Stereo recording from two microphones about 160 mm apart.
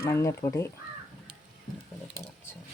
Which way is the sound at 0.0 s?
15° left (ahead or behind).